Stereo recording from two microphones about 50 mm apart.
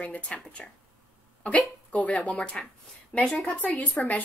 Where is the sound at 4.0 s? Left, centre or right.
Left.